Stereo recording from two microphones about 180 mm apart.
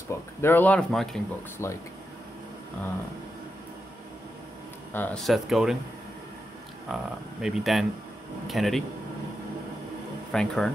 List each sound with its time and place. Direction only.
0.1 s speech: 10° left (ahead or behind)
1.6 s speech: 15° left (ahead or behind)
4.9 s speech: 5° left (ahead or behind)
6.9 s speech: centre (ahead or behind)
10.3 s speech: 5° left (ahead or behind)